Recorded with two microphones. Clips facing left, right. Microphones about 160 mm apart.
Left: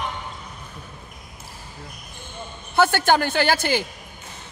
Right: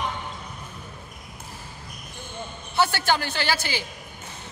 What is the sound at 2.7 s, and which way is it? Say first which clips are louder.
A woman's voice: left 5 dB; 50° left (ahead or behind).